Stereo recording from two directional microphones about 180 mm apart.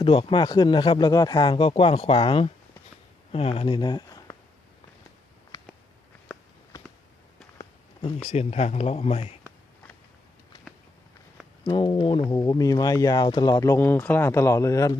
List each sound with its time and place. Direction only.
0.0 s speech: 30° left (ahead or behind)
8.3 s speech: 35° left (ahead or behind)
11.6 s speech: 25° left (ahead or behind)